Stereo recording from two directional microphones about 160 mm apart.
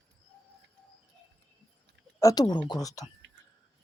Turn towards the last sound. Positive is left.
turn(degrees=20)  # may be behind; listen again after turning